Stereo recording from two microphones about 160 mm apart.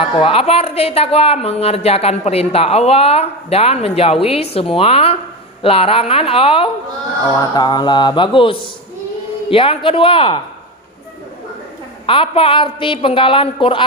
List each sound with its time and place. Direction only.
0.0 s speech: 35° left (ahead or behind)
7.5 s mantra: 25° left (ahead or behind)
9.5 s speech: 35° left (ahead or behind)
12.0 s speech: 35° left (ahead or behind)